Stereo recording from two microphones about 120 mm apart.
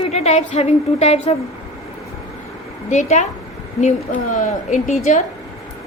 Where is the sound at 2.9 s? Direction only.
85° left.